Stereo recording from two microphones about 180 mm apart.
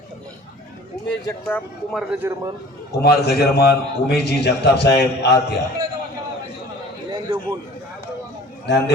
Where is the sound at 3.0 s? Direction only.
60° left (ahead or behind).